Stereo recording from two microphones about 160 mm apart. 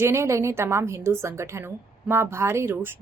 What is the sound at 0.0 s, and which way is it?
A woman's voice, 15° right (ahead or behind).